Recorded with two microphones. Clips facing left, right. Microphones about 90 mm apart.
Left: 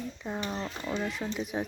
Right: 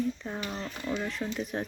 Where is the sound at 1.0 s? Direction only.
5° left (ahead or behind).